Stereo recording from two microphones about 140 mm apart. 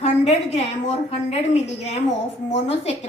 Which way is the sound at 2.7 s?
50° left (ahead or behind).